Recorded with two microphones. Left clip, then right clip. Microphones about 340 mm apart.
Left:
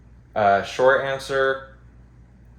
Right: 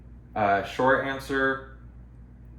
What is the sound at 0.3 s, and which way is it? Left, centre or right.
Speech, left.